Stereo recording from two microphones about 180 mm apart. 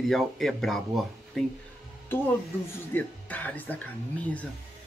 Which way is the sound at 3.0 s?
10° left (ahead or behind).